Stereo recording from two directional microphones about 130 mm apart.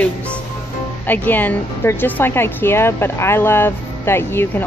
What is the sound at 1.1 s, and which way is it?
Speech, 15° left (ahead or behind).